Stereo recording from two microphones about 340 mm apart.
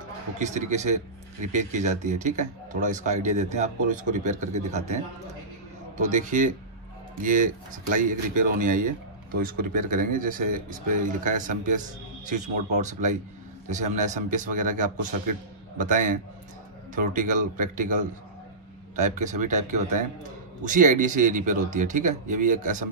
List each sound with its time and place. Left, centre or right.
0.4 s speech: right